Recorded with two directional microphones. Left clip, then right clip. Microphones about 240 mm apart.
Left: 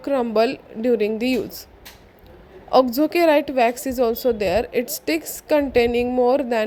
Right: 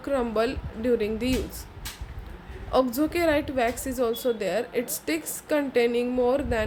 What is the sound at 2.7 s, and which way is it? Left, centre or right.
A woman's voice, left.